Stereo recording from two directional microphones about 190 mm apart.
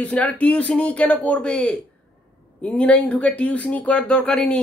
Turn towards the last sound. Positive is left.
turn(degrees=5)  # may be behind; listen again after turning